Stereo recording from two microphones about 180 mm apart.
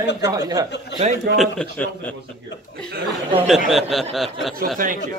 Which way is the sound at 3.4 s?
Centre (ahead or behind).